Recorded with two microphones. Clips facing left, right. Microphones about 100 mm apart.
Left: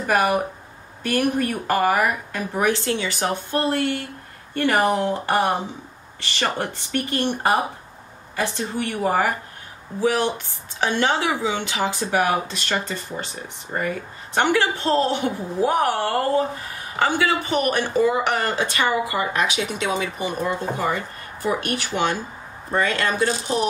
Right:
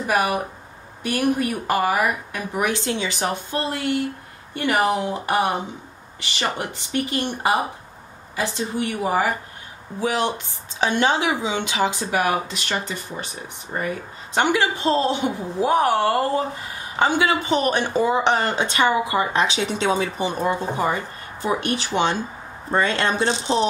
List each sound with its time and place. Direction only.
0.0 s a woman's voice: 15° right (ahead or behind)
8.4 s a woman's voice: 15° right (ahead or behind)
14.3 s speech: 20° right (ahead or behind)